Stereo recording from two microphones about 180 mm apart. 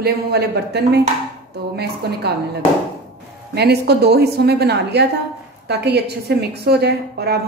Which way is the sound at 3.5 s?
65° right (ahead or behind).